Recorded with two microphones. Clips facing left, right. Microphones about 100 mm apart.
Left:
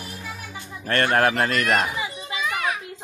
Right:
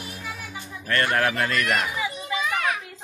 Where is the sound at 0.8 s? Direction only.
35° left (ahead or behind).